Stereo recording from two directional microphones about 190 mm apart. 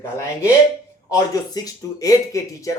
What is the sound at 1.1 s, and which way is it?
A man's voice, 20° left (ahead or behind).